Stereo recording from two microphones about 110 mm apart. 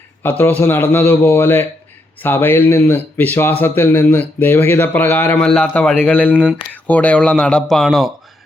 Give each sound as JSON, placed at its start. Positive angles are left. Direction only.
{"t": 0.2, "sound": "a man's voice", "side_deg": 20}